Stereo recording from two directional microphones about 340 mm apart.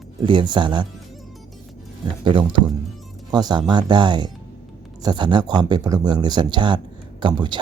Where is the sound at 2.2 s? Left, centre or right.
Centre.